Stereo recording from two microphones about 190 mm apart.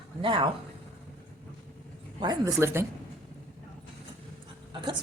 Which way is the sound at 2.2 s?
20° right (ahead or behind).